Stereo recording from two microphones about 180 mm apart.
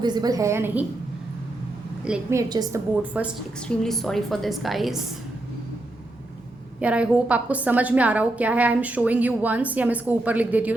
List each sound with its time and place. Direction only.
0.0 s a woman's voice: 20° right (ahead or behind)
2.3 s a woman's voice: 20° right (ahead or behind)
3.8 s a woman's voice: centre (ahead or behind)
6.7 s a woman's voice: 5° right (ahead or behind)